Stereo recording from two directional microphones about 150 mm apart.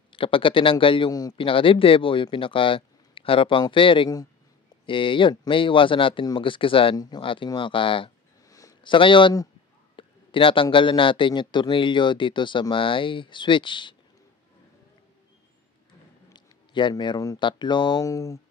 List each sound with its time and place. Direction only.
0.1 s speech: 35° left (ahead or behind)
8.5 s a sound: 25° left (ahead or behind)
8.9 s speech: 35° left (ahead or behind)
16.3 s speech: 30° left (ahead or behind)